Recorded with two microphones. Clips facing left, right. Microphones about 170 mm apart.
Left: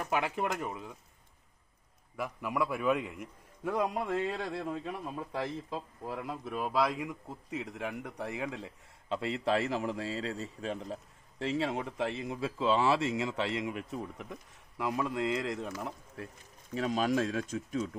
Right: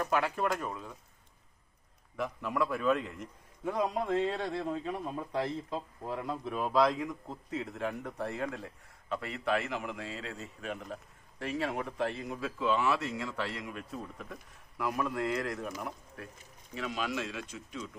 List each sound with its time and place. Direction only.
0.0 s a man's voice: 15° left (ahead or behind)
2.1 s a man's voice: 10° left (ahead or behind)
16.7 s speech: 40° left (ahead or behind)